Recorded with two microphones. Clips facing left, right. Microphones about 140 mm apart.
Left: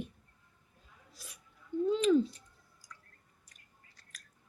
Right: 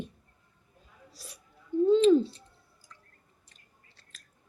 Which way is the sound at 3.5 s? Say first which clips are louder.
Even; 30° right (ahead or behind).